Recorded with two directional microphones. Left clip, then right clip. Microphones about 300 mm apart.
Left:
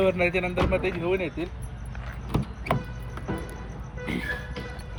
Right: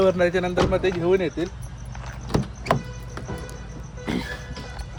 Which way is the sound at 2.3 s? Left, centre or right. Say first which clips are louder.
Right 5 dB; right.